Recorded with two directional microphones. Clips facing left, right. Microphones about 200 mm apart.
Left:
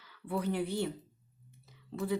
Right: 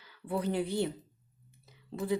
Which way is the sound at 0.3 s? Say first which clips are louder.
Right 1 dB; 20° right (ahead or behind).